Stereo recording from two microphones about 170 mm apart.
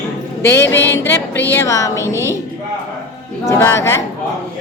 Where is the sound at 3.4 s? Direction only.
15° left (ahead or behind).